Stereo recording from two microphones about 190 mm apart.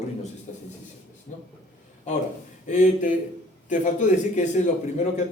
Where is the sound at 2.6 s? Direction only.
40° left (ahead or behind).